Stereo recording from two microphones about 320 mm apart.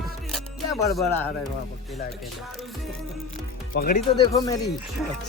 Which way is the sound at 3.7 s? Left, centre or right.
Left.